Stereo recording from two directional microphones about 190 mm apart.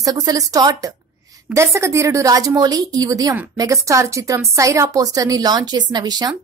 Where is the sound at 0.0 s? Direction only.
20° right (ahead or behind).